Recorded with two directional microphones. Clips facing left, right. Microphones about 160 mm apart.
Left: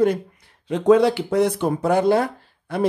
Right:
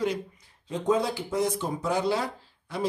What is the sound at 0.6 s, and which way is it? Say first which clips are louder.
Speech: left 10 dB; 75° left (ahead or behind).